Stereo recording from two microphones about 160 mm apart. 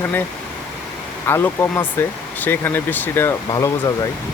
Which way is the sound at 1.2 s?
15° left (ahead or behind).